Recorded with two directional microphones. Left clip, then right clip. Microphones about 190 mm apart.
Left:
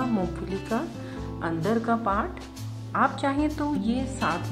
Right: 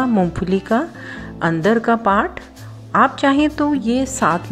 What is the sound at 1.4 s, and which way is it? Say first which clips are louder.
A woman's voice: right 11 dB; 25° right (ahead or behind).